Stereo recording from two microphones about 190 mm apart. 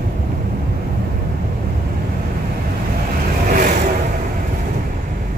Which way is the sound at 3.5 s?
45° right (ahead or behind).